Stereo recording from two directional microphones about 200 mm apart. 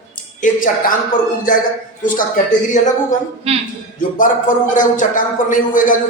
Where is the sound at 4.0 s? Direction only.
40° left (ahead or behind).